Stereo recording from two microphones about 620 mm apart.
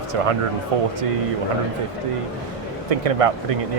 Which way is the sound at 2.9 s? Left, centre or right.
Right.